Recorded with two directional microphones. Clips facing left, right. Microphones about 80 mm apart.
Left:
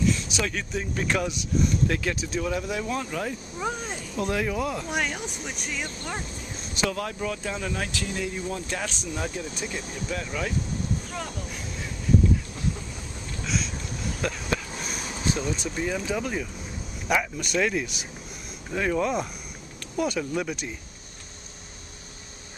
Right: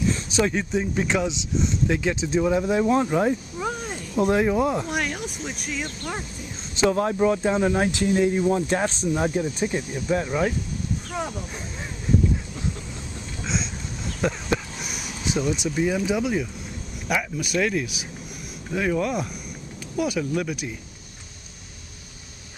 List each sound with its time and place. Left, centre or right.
0.0 s speech: right
3.5 s a sound: centre
4.2 s speech: right
4.8 s speech: centre
6.7 s speech: right
14.2 s a sound: centre
15.2 s speech: centre